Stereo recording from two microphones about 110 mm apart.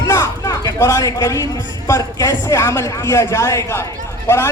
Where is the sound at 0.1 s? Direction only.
30° left (ahead or behind).